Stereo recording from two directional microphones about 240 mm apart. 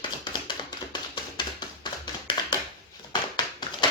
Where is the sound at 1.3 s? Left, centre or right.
Centre.